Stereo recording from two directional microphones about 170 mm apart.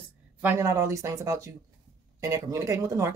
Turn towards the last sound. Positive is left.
turn(degrees=-15)  # may be behind; listen again after turning